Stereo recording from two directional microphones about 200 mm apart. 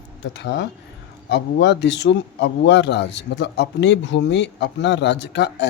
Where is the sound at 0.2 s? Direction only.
60° left (ahead or behind).